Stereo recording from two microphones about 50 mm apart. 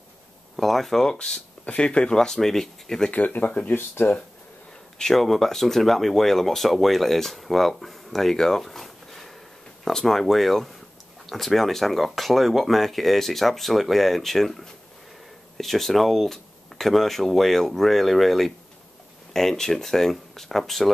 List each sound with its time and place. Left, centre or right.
0.6 s speech: centre
1.1 s speech: centre
3.1 s speech: left
3.6 s speech: left
4.9 s speech: centre